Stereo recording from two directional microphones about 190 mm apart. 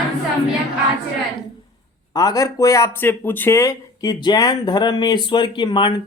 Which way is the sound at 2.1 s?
20° left (ahead or behind).